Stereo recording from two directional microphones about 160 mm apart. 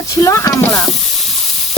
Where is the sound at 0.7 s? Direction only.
5° left (ahead or behind).